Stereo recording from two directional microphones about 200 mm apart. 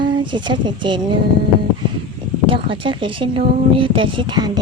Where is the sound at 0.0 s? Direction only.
25° right (ahead or behind).